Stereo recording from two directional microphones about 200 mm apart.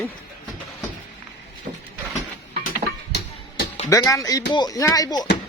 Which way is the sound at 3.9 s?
15° left (ahead or behind).